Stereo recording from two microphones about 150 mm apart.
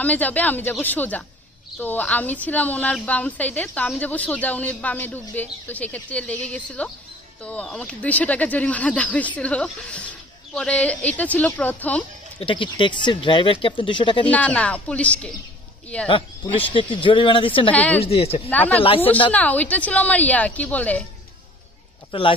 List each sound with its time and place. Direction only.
0.0 s a woman's voice: 10° left (ahead or behind)
12.4 s speech: 35° left (ahead or behind)
14.2 s a woman's voice: 10° left (ahead or behind)
16.1 s speech: 35° left (ahead or behind)
17.6 s a woman's voice: 10° left (ahead or behind)
17.9 s speech: 40° left (ahead or behind)
18.5 s a woman's voice: 10° left (ahead or behind)
22.1 s speech: 35° left (ahead or behind)